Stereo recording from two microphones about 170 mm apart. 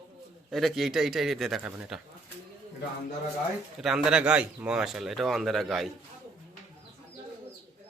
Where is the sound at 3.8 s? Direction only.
5° right (ahead or behind).